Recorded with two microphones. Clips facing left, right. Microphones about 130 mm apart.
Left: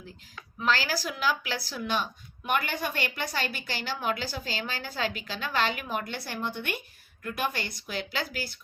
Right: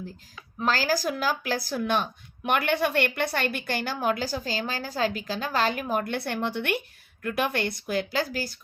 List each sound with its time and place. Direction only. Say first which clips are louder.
0.6 s speech: right 3 dB; 40° right (ahead or behind)